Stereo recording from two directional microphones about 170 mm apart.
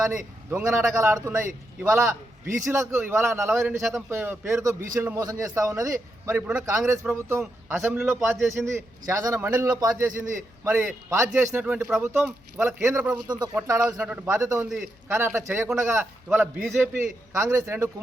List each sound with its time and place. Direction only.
0.5 s a man's voice: 15° right (ahead or behind)
6.2 s a man's voice: 10° right (ahead or behind)
10.1 s a man's voice: 50° right (ahead or behind)
10.6 s a man's voice: 10° right (ahead or behind)